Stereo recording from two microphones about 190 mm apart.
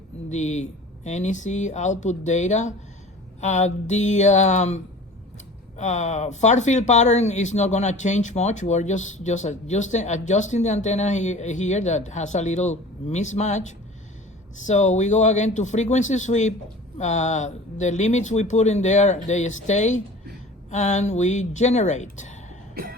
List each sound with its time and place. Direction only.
0.3 s speech: 35° left (ahead or behind)
22.7 s cough: 50° right (ahead or behind)